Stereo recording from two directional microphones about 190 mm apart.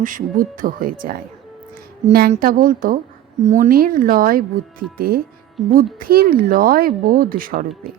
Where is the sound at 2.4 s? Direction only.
50° right (ahead or behind).